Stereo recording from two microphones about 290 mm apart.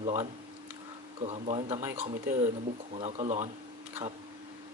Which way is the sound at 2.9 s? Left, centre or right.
Right.